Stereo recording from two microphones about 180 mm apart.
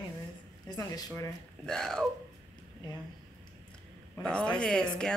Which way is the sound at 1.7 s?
5° left (ahead or behind).